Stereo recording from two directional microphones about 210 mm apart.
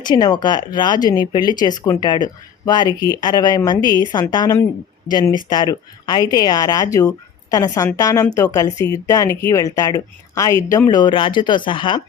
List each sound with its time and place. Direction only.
0.0 s speech: 20° left (ahead or behind)